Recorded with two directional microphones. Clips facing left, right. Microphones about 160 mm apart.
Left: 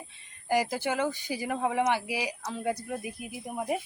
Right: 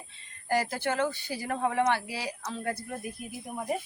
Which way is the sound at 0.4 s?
15° left (ahead or behind).